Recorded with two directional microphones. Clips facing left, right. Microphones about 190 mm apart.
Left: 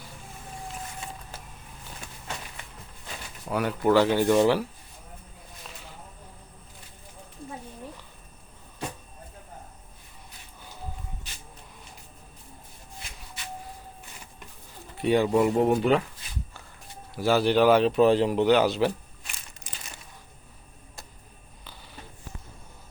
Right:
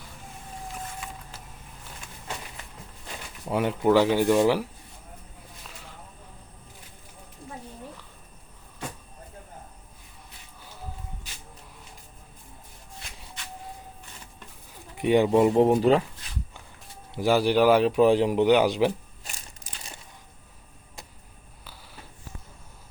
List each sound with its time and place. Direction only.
3.4 s speech: 25° right (ahead or behind)
3.8 s speech: 10° right (ahead or behind)
14.9 s speech: 15° right (ahead or behind)
17.2 s speech: 15° right (ahead or behind)
19.2 s crushing: 40° right (ahead or behind)